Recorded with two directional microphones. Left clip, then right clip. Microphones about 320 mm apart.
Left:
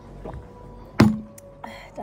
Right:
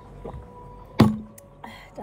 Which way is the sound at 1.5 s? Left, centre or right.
Centre.